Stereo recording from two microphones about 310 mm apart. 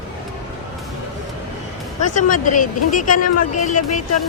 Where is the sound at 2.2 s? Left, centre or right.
Left.